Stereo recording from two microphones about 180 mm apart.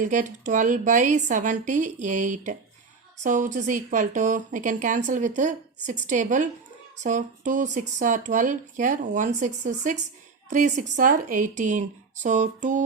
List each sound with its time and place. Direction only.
0.0 s a woman's voice: 45° right (ahead or behind)